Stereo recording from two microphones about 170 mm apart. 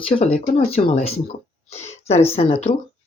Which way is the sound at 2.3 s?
35° left (ahead or behind).